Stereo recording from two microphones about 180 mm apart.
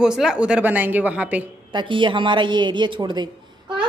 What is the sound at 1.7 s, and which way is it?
A woman's voice, 25° right (ahead or behind).